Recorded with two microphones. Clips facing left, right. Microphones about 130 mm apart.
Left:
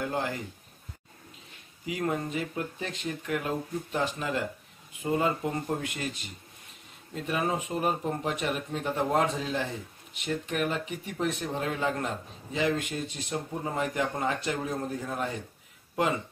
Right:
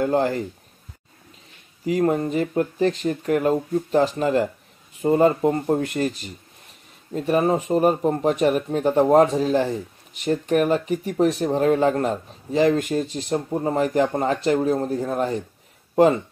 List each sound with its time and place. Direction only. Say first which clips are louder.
0.0 s speech: right 11 dB; 40° right (ahead or behind)
1.9 s speech: right 10 dB; 40° right (ahead or behind)